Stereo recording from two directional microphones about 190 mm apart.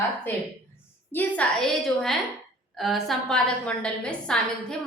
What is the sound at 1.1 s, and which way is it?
A woman's voice, 10° left (ahead or behind).